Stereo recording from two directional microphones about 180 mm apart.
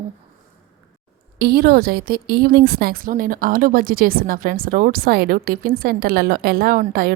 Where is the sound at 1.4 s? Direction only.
60° right (ahead or behind).